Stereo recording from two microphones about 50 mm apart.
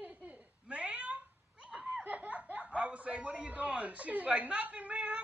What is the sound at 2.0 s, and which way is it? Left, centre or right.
Snicker, right.